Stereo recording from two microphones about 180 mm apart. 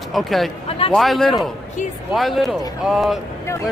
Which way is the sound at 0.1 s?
Centre (ahead or behind).